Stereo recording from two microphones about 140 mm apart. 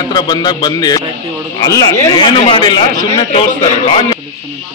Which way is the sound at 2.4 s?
35° left (ahead or behind).